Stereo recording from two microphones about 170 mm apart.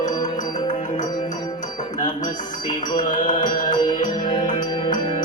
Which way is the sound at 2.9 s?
50° left (ahead or behind).